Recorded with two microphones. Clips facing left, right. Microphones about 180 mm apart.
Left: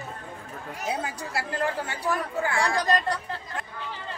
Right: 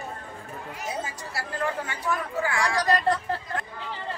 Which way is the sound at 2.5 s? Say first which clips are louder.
Left 1 dB; 30° left (ahead or behind).